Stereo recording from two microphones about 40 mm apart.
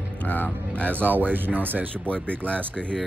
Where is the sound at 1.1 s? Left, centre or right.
Right.